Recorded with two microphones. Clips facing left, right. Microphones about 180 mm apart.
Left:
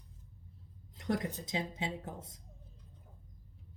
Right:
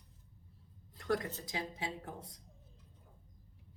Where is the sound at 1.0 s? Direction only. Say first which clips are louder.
Even; 20° left (ahead or behind).